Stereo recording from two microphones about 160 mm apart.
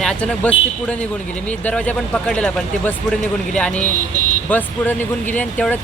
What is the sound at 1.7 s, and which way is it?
Speech, 5° left (ahead or behind).